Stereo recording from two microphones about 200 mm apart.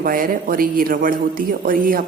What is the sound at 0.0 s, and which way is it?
A man's voice, 45° right (ahead or behind).